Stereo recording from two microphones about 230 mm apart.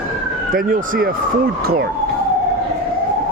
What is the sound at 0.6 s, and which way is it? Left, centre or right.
Speech, right.